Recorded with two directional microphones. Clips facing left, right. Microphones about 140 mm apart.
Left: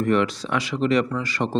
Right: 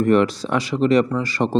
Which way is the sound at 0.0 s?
40° right (ahead or behind).